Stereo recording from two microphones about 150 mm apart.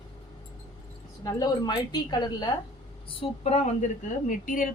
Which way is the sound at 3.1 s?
40° left (ahead or behind).